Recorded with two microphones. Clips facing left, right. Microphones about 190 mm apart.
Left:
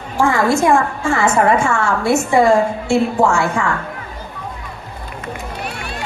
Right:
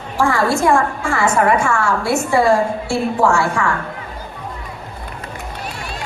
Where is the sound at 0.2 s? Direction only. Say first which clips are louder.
Left 2 dB; 20° left (ahead or behind).